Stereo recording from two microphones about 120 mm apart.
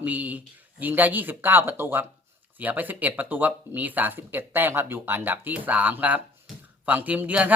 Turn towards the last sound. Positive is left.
turn(degrees=-15)  # may be behind; listen again after turning